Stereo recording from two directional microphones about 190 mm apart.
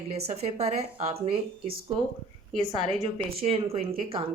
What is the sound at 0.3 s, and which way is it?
A woman's voice, 35° right (ahead or behind).